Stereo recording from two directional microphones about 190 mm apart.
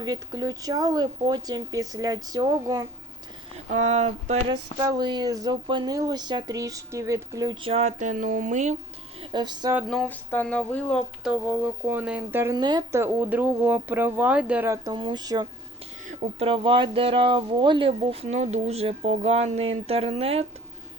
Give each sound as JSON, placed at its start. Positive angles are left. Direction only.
{"t": 0.0, "sound": "speech", "side_deg": -20}
{"t": 3.7, "sound": "speech", "side_deg": -40}
{"t": 4.5, "sound": "speech", "side_deg": -20}
{"t": 9.2, "sound": "speech", "side_deg": -25}
{"t": 9.9, "sound": "a sound", "side_deg": 5}
{"t": 14.9, "sound": "speech", "side_deg": -25}
{"t": 16.0, "sound": "speech", "side_deg": -35}